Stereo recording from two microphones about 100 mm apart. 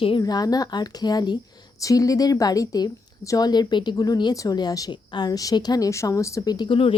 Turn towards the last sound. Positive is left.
turn(degrees=45)  # may be behind; listen again after turning